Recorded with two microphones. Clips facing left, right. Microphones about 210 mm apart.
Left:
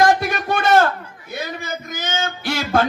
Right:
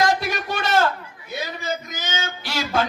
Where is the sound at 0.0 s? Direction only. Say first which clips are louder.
Left 5 dB; 50° left (ahead or behind).